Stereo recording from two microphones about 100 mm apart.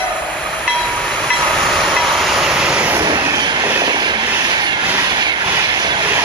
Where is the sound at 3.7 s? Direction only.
45° right (ahead or behind).